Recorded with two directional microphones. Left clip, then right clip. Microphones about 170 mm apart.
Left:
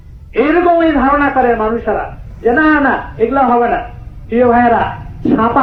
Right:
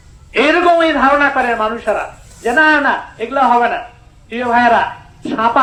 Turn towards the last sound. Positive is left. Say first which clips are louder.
# left 2 dB
turn(degrees=-25)  # may be behind; listen again after turning